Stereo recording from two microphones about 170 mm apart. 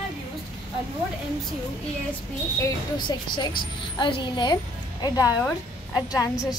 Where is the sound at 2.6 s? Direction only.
25° left (ahead or behind).